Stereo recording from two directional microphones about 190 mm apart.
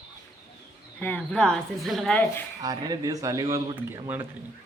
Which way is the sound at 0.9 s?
10° left (ahead or behind).